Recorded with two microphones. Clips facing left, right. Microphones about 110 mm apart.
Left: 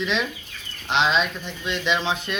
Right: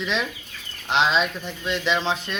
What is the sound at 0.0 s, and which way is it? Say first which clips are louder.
Speech: left 1 dB; centre (ahead or behind).